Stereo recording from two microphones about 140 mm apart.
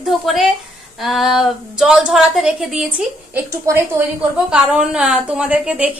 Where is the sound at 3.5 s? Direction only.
20° right (ahead or behind).